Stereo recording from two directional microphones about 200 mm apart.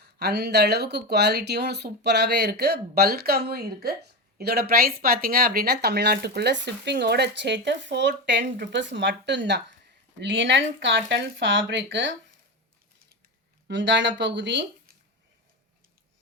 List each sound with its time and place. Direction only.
0.0 s speech: 55° right (ahead or behind)
13.7 s speech: 60° right (ahead or behind)